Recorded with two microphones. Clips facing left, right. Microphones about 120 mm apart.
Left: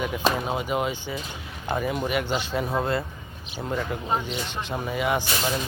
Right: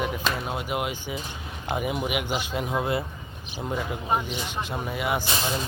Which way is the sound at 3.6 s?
10° right (ahead or behind).